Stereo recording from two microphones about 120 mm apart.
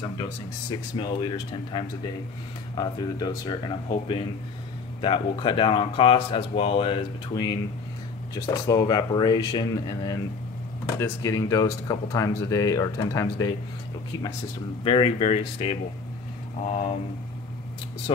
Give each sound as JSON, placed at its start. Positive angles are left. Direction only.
{"t": 0.2, "sound": "speech", "side_deg": 35}
{"t": 8.5, "sound": "speech", "side_deg": 30}
{"t": 14.8, "sound": "speech", "side_deg": 50}